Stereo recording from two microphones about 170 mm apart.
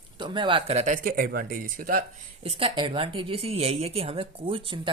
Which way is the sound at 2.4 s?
35° right (ahead or behind).